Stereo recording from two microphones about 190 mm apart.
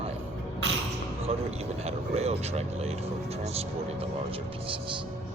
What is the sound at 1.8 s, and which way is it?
Speech, 35° right (ahead or behind).